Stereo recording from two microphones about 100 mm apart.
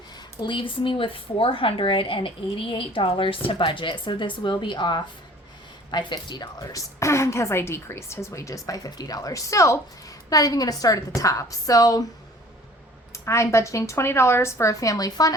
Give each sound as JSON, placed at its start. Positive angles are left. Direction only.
{"t": 0.3, "sound": "a woman's voice", "side_deg": 55}
{"t": 13.1, "sound": "a woman's voice", "side_deg": 30}